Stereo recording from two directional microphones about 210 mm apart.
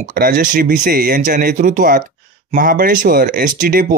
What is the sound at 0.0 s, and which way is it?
Speech, 40° right (ahead or behind).